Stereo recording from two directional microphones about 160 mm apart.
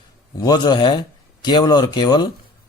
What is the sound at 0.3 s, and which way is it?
Speech, 25° left (ahead or behind).